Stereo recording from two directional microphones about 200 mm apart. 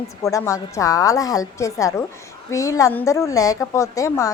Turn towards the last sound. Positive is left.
turn(degrees=15)  # may be behind; listen again after turning